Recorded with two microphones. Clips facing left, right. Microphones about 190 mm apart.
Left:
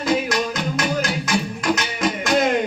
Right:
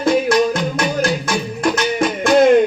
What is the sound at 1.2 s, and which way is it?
Music, 50° right (ahead or behind).